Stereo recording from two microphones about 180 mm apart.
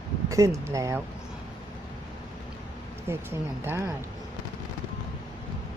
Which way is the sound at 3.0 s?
15° right (ahead or behind).